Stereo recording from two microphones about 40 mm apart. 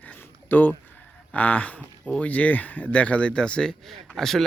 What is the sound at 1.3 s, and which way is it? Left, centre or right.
Speech, left.